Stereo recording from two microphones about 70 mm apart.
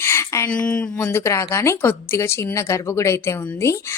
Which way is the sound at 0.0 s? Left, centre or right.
Left.